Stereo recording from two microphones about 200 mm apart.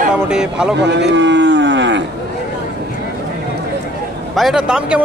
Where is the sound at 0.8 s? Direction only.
60° right (ahead or behind).